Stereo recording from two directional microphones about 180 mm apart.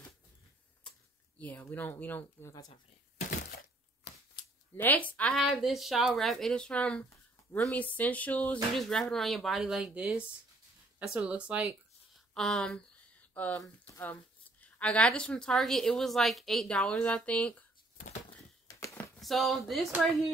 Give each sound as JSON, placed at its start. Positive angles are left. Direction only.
{"t": 1.4, "sound": "speech", "side_deg": 10}
{"t": 4.7, "sound": "speech", "side_deg": 10}
{"t": 18.7, "sound": "a sound", "side_deg": 15}
{"t": 19.1, "sound": "speech", "side_deg": 0}